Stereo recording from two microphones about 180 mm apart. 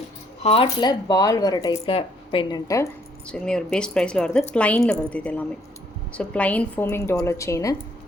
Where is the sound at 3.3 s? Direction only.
5° left (ahead or behind).